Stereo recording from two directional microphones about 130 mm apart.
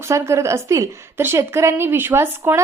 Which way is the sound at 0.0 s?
20° right (ahead or behind).